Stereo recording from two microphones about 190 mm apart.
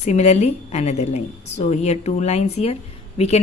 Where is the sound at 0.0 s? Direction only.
35° left (ahead or behind).